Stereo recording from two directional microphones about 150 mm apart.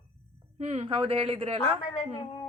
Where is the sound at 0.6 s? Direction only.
45° right (ahead or behind).